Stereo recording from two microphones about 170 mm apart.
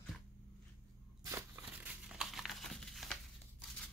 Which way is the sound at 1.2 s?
15° right (ahead or behind).